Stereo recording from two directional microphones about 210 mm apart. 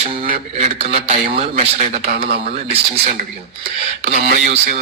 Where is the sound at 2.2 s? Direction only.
50° right (ahead or behind).